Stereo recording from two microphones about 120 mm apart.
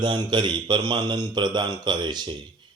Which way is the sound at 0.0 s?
40° right (ahead or behind).